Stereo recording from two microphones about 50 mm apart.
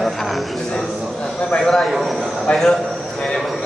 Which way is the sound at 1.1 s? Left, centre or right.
Centre.